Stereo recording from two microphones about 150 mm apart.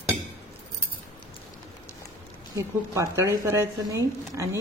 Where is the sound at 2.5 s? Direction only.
20° right (ahead or behind).